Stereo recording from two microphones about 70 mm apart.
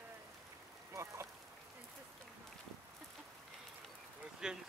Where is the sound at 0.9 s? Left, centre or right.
Right.